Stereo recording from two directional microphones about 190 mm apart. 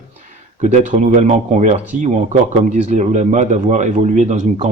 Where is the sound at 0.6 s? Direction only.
40° right (ahead or behind).